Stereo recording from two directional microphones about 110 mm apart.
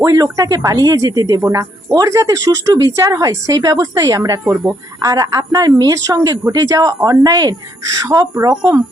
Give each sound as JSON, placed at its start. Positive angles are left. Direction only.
{"t": 0.0, "sound": "speech", "side_deg": -35}